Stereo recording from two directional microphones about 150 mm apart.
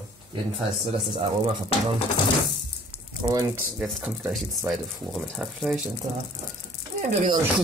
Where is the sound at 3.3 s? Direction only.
20° right (ahead or behind).